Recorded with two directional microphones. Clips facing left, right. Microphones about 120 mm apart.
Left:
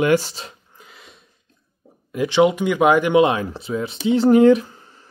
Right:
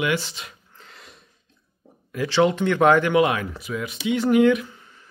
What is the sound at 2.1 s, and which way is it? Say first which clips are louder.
Speech: left 4 dB; 20° left (ahead or behind).